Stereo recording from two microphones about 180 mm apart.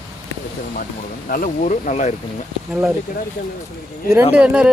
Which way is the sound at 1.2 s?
50° left (ahead or behind).